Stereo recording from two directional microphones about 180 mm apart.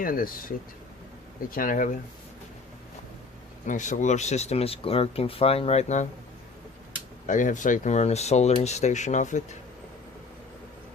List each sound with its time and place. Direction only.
0.0 s speech: 50° left (ahead or behind)
1.5 s speech: 50° left (ahead or behind)
3.7 s speech: 45° left (ahead or behind)
7.3 s speech: 45° left (ahead or behind)